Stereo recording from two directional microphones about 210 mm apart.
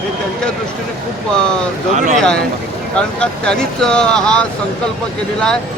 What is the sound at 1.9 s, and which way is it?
Speech, 35° right (ahead or behind).